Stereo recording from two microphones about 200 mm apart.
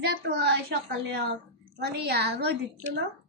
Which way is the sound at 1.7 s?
55° right (ahead or behind).